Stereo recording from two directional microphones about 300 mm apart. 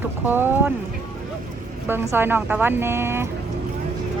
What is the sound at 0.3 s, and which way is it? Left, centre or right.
Speech, centre.